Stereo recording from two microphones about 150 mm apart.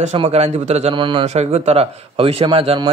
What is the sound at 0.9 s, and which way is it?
Speech, 35° right (ahead or behind).